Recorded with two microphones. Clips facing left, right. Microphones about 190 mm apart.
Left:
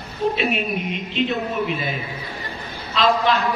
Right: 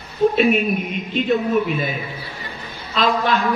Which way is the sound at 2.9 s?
50° right (ahead or behind).